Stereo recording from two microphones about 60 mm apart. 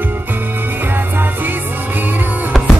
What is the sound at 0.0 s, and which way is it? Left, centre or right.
Music, right.